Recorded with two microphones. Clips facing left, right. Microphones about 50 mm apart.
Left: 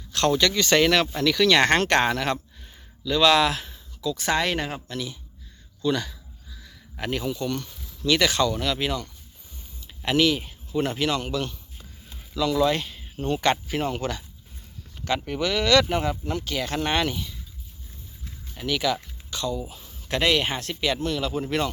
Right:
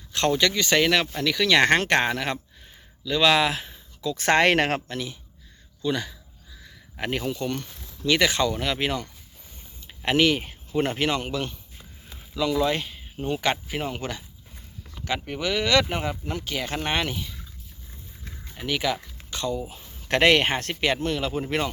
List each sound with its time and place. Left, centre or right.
0.1 s speech: centre
4.0 s speech: right
4.3 s speech: right
4.9 s speech: right
5.8 s a sound: centre
8.0 s speech: right
12.3 s speech: centre
18.5 s speech: centre
19.3 s speech: right
19.7 s a sound: right
20.1 s speech: right
20.8 s speech: right